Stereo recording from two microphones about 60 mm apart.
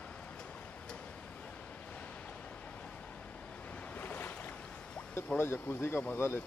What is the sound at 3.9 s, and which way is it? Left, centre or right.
Boat, left.